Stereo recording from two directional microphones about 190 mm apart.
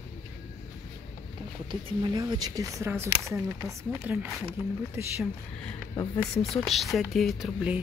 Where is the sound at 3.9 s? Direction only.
5° right (ahead or behind).